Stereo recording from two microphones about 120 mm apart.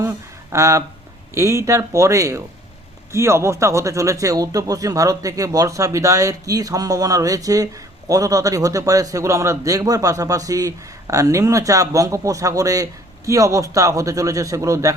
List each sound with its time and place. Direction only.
0.0 s speech: 25° right (ahead or behind)